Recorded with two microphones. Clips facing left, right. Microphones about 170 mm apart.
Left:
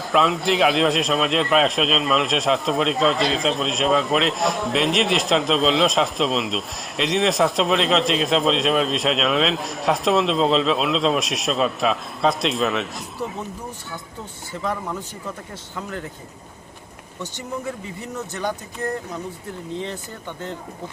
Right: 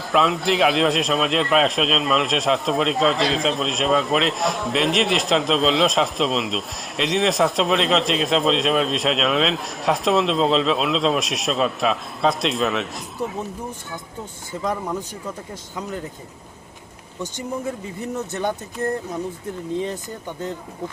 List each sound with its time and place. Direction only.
0.0 s a man's voice: centre (ahead or behind)
14.6 s speech: 20° right (ahead or behind)